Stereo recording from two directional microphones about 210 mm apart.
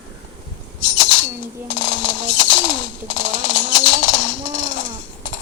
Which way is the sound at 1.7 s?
60° left (ahead or behind).